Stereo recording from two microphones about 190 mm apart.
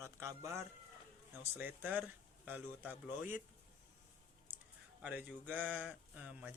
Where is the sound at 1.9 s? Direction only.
10° right (ahead or behind).